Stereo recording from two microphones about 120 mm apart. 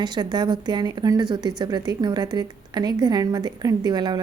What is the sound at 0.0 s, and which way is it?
A woman's voice, 35° right (ahead or behind).